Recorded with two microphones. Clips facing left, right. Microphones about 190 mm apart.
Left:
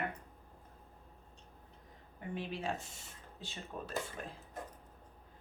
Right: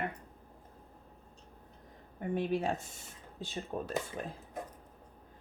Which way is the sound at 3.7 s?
45° right (ahead or behind).